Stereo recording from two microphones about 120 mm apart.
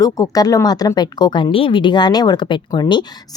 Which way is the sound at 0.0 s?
30° left (ahead or behind).